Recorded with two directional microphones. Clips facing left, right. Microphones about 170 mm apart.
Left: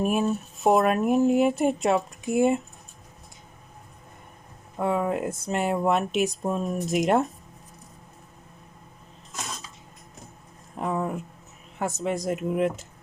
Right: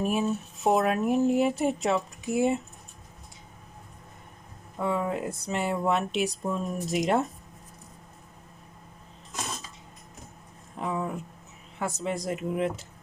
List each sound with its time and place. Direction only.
0.0 s speech: 55° left (ahead or behind)
4.8 s speech: 55° left (ahead or behind)
10.8 s speech: 45° left (ahead or behind)